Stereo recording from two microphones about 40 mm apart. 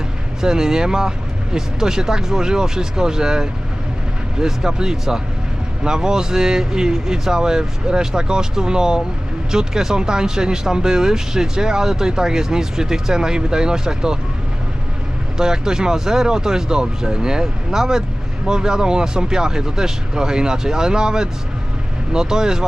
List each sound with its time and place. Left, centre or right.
0.4 s speech: centre
15.4 s speech: centre